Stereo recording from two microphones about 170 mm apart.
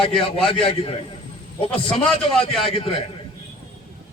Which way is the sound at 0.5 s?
35° left (ahead or behind).